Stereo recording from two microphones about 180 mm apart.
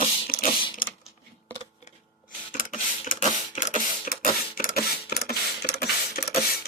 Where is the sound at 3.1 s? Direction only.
40° left (ahead or behind); by 5.8 s 60° left (ahead or behind).